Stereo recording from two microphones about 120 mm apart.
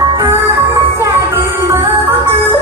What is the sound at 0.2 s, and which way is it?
Music, 25° right (ahead or behind).